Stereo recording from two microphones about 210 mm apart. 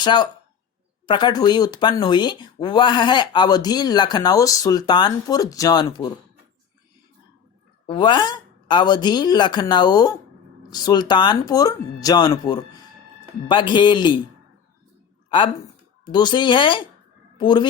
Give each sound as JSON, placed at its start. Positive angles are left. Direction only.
{"t": 0.0, "sound": "speech", "side_deg": 20}
{"t": 7.9, "sound": "speech", "side_deg": 20}
{"t": 16.0, "sound": "a woman's voice", "side_deg": 20}